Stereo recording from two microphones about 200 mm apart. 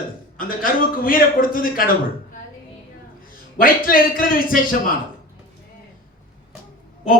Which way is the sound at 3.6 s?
45° left (ahead or behind).